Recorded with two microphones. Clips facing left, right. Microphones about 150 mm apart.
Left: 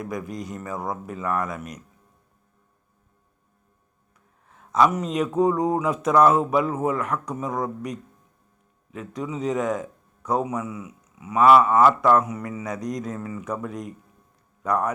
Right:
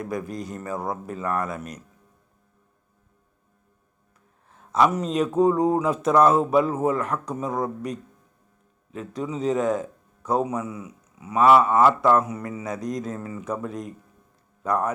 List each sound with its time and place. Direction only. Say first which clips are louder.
0.1 s speech: right 1 dB; 30° right (ahead or behind)
4.5 s a man's voice: left 1 dB; 30° right (ahead or behind)